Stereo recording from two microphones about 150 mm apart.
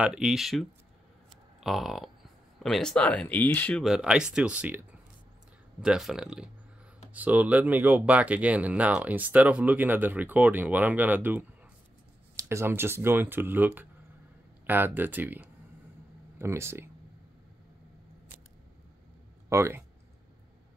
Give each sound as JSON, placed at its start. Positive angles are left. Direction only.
{"t": 0.0, "sound": "speech", "side_deg": -5}
{"t": 3.8, "sound": "speech", "side_deg": -5}
{"t": 19.5, "sound": "speech", "side_deg": -20}